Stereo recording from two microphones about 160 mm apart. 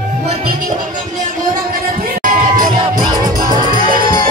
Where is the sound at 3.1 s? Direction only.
25° right (ahead or behind).